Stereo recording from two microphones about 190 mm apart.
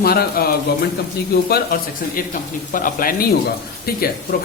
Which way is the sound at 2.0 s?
50° left (ahead or behind).